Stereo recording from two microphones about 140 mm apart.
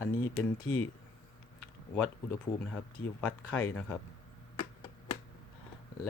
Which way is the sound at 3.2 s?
15° left (ahead or behind).